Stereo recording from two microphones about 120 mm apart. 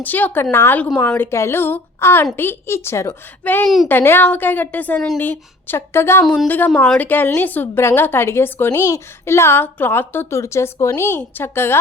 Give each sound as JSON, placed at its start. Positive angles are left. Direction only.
{"t": 0.0, "sound": "a woman's voice", "side_deg": 15}
{"t": 3.4, "sound": "a woman's voice", "side_deg": 15}
{"t": 6.2, "sound": "a woman's voice", "side_deg": 5}